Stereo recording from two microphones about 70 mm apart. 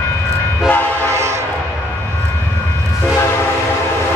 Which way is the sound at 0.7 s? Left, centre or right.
Left.